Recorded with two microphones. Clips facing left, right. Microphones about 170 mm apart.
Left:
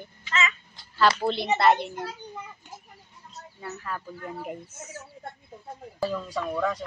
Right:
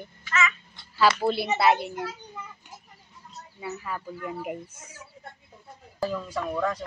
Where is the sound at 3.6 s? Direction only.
10° right (ahead or behind).